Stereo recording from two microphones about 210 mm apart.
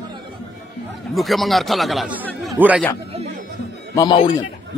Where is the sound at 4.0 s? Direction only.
20° left (ahead or behind).